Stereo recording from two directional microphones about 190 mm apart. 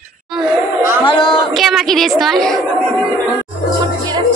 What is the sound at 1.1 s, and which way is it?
Speech, 25° left (ahead or behind).